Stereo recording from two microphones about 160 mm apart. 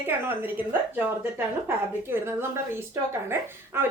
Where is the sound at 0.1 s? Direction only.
10° right (ahead or behind).